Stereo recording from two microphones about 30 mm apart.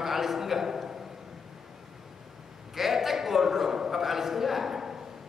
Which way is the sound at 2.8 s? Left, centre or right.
Centre.